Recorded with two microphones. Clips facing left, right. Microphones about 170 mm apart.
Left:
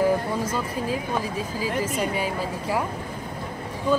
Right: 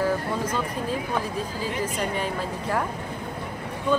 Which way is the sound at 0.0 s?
10° left (ahead or behind).